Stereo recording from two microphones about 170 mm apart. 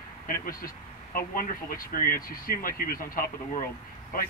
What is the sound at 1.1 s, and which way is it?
Speech, 55° left (ahead or behind).